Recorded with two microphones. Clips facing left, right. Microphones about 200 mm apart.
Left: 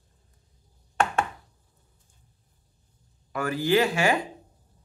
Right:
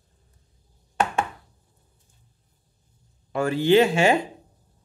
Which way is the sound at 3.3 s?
25° right (ahead or behind).